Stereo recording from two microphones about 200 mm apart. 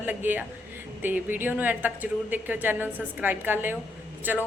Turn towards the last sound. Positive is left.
turn(degrees=-10)  # may be behind; listen again after turning